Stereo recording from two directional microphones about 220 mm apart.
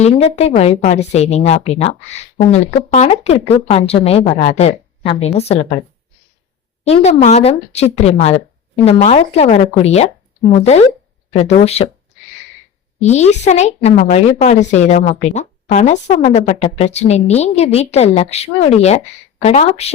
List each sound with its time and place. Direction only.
0.0 s a woman's voice: 30° left (ahead or behind)
6.8 s a woman's voice: 30° left (ahead or behind)
13.0 s a woman's voice: 30° left (ahead or behind)